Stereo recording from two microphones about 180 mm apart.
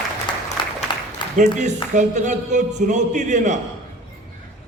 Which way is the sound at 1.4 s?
40° right (ahead or behind).